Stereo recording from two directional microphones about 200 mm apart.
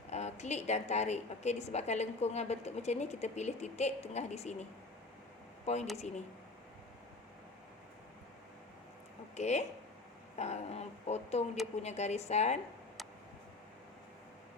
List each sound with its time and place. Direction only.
0.1 s a woman's voice: 35° left (ahead or behind)
5.6 s a woman's voice: 35° left (ahead or behind)
9.3 s a woman's voice: 35° left (ahead or behind)